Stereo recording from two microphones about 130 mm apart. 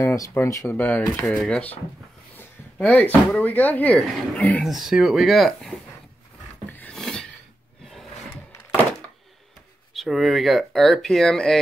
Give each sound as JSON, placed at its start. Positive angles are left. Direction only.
{"t": 0.0, "sound": "speech", "side_deg": 20}
{"t": 4.6, "sound": "speech", "side_deg": 0}
{"t": 6.7, "sound": "a sound", "side_deg": 10}
{"t": 7.0, "sound": "filing", "side_deg": 5}
{"t": 9.9, "sound": "speech", "side_deg": 0}